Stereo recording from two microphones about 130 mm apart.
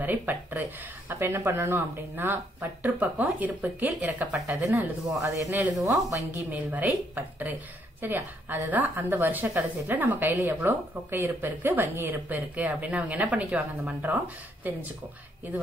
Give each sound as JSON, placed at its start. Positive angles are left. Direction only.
{"t": 0.0, "sound": "a woman's voice", "side_deg": -15}
{"t": 5.2, "sound": "a woman's voice", "side_deg": -25}